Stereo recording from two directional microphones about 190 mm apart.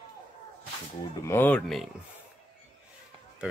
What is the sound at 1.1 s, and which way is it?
Speech, 10° left (ahead or behind).